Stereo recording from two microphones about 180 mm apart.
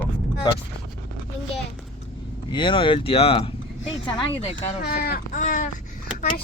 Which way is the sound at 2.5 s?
25° left (ahead or behind).